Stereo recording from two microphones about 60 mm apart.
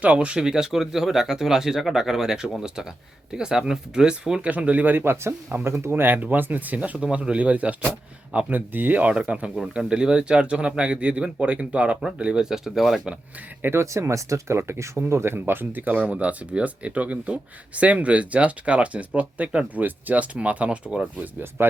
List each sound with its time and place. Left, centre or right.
0.0 s speech: right
4.4 s speech: right
5.6 s speech: right
6.7 s speech: centre
13.6 s speech: right
13.8 s speech: right
15.8 s speech: right
21.2 s speech: right